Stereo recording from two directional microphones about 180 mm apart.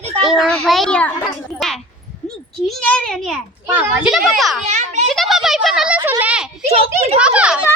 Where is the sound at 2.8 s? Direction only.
5° left (ahead or behind).